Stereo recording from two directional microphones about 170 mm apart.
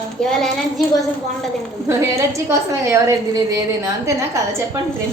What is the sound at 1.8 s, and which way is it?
A woman's voice, 15° right (ahead or behind).